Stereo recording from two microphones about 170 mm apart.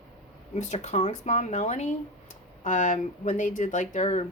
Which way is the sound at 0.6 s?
45° left (ahead or behind).